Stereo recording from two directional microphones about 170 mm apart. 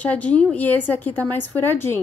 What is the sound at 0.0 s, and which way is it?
A woman's voice, 10° left (ahead or behind).